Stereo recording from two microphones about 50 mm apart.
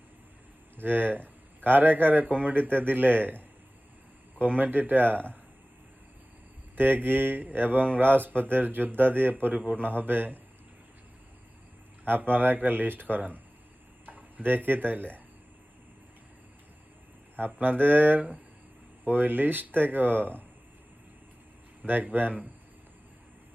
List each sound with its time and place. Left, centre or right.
0.8 s a man's voice: right
4.5 s speech: right
6.7 s speech: right
12.0 s speech: right
14.0 s tick-tock: right
14.5 s speech: right
17.3 s speech: right
21.8 s speech: right